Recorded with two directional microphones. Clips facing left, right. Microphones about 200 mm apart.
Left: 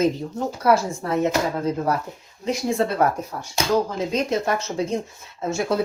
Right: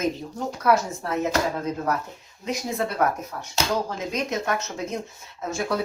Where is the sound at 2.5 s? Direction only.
30° left (ahead or behind).